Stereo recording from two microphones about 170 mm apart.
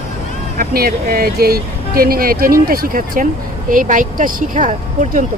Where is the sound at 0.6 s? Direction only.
65° right (ahead or behind).